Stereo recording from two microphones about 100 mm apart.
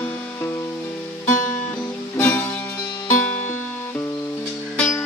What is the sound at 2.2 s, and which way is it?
Music, 20° left (ahead or behind).